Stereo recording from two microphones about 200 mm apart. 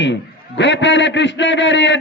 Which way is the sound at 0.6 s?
65° left (ahead or behind).